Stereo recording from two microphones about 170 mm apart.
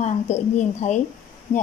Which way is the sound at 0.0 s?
40° left (ahead or behind).